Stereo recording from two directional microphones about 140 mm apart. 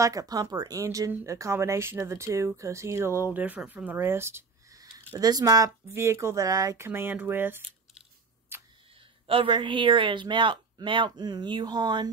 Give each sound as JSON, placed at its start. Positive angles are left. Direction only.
{"t": 0.0, "sound": "speech", "side_deg": -25}
{"t": 8.5, "sound": "camera", "side_deg": -15}
{"t": 9.3, "sound": "speech", "side_deg": -35}